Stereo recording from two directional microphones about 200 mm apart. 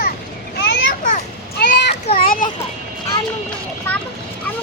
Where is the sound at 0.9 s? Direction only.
40° left (ahead or behind).